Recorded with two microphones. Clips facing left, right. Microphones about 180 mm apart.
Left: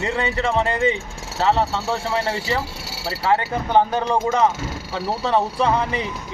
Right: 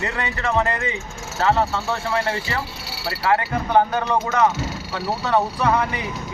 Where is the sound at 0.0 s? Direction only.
30° left (ahead or behind).